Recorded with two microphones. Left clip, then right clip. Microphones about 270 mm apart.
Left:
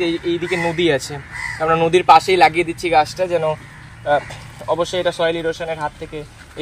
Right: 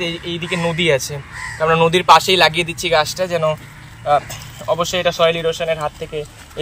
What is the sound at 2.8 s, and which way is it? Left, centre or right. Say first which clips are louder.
Speech: left 1 dB; centre.